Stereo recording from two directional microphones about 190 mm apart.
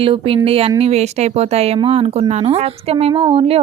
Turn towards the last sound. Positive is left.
turn(degrees=-30)  # may be behind; listen again after turning